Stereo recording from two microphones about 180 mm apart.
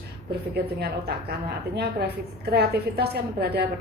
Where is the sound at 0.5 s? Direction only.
60° right (ahead or behind).